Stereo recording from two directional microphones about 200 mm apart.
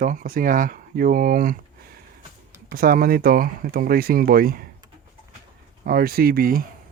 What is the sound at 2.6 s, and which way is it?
Speech, 45° right (ahead or behind).